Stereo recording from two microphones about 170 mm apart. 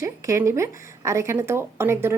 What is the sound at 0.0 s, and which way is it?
Speech, 20° right (ahead or behind).